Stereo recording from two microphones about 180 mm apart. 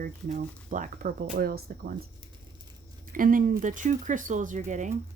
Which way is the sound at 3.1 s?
50° right (ahead or behind).